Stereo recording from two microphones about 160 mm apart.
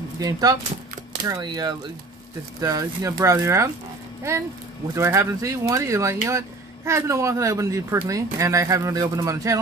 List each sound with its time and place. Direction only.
0.2 s speech: 25° right (ahead or behind)
4.9 s speech: 15° right (ahead or behind)